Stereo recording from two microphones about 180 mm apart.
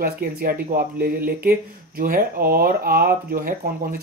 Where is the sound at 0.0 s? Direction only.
55° right (ahead or behind).